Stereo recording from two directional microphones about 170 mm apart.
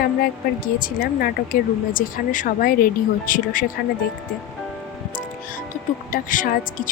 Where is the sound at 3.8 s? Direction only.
70° left (ahead or behind).